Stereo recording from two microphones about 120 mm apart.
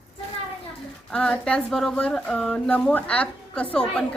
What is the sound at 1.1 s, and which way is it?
Speech, 10° left (ahead or behind).